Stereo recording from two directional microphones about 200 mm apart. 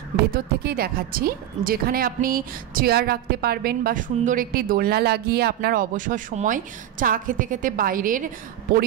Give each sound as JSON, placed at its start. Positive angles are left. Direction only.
{"t": 0.3, "sound": "speech", "side_deg": -50}